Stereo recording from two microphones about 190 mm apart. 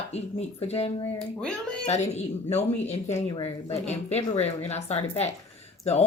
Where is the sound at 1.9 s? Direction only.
35° left (ahead or behind).